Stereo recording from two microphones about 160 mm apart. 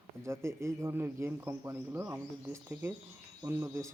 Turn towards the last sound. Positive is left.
turn(degrees=-15)  # may be behind; listen again after turning